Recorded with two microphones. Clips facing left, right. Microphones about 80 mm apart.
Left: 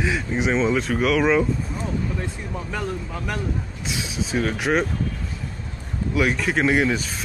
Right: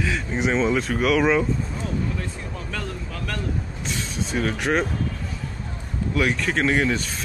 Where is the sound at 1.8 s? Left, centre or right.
Centre.